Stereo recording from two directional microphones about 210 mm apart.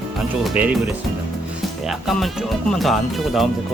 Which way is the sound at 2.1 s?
Centre (ahead or behind).